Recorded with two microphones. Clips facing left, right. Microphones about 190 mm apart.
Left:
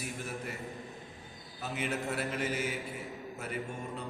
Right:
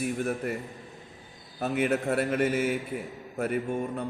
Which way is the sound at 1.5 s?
55° right (ahead or behind).